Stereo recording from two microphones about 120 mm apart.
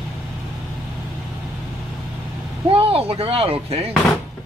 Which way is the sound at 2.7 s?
50° right (ahead or behind).